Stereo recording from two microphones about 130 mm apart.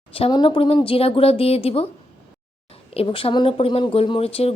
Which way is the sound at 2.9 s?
45° left (ahead or behind).